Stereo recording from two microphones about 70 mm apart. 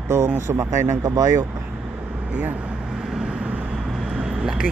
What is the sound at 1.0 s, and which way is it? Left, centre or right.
Speech, right.